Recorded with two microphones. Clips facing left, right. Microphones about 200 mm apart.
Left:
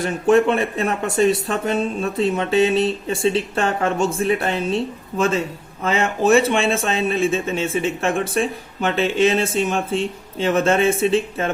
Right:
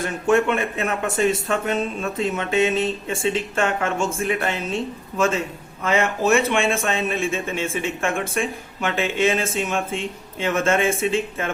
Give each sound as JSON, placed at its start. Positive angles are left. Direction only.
{"t": 0.3, "sound": "speech", "side_deg": 35}